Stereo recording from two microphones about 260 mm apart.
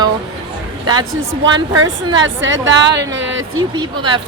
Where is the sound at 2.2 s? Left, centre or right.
Right.